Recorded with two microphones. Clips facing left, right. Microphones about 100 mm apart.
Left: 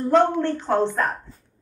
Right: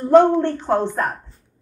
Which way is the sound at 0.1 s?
15° right (ahead or behind).